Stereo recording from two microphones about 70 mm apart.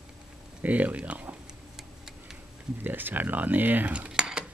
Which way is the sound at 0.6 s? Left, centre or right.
Right.